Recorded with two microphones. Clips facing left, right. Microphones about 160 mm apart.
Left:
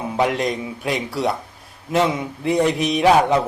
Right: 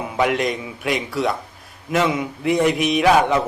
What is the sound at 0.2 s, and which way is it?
Speech, 35° left (ahead or behind).